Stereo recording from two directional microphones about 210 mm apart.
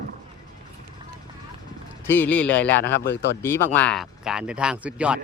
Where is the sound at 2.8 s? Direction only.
55° left (ahead or behind).